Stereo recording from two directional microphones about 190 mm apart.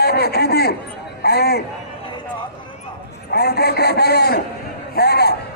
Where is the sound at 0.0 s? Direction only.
55° left (ahead or behind).